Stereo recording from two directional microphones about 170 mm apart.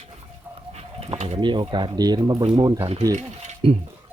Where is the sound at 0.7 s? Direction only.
35° right (ahead or behind).